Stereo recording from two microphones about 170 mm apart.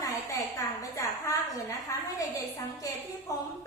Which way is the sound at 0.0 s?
20° left (ahead or behind).